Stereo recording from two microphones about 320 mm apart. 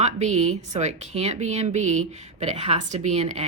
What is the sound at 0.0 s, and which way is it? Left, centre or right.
Speech, right.